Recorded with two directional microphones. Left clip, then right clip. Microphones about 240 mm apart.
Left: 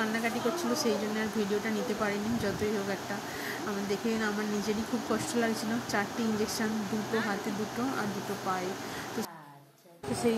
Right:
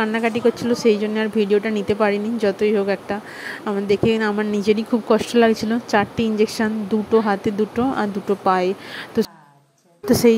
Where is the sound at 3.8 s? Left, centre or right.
Right.